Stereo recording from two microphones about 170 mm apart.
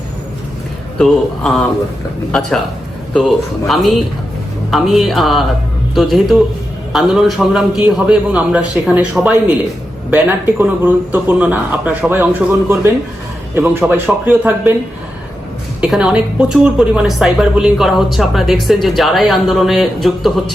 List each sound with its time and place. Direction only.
0.9 s a woman's voice: centre (ahead or behind)
3.1 s a woman's voice: centre (ahead or behind)
15.8 s a woman's voice: 5° right (ahead or behind)